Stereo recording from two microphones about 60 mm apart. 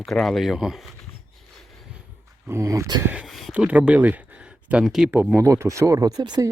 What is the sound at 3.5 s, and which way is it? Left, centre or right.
Speech, right.